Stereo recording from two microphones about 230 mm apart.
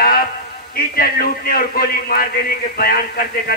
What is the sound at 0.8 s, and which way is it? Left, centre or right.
A man's voice, left.